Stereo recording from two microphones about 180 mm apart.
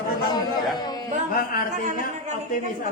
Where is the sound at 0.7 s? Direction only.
20° left (ahead or behind).